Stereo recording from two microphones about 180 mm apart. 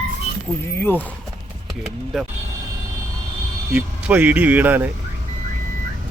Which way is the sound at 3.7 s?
5° right (ahead or behind).